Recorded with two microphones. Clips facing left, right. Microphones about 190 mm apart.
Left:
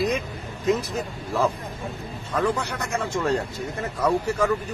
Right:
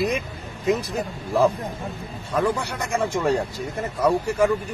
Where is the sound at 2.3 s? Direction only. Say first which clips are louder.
Right 1 dB; 10° right (ahead or behind).